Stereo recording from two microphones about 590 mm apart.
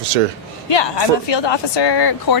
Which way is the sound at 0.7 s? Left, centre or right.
Left.